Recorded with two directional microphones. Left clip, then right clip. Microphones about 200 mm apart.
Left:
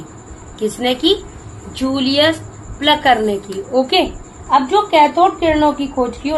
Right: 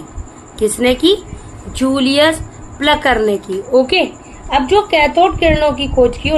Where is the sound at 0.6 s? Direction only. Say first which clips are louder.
Right 4 dB; 55° right (ahead or behind).